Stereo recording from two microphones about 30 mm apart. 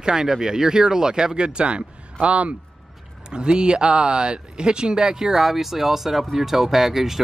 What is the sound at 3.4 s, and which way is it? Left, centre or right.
Speech, right.